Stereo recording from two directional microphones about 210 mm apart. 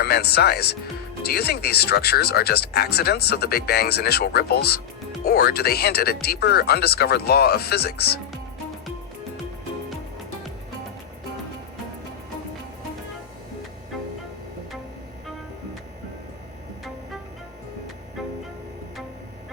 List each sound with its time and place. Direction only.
0.0 s speech: 50° left (ahead or behind)